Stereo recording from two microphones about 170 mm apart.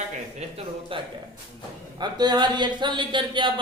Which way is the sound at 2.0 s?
25° right (ahead or behind).